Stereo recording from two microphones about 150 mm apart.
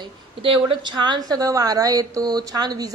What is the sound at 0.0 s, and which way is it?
A woman's voice, 35° right (ahead or behind).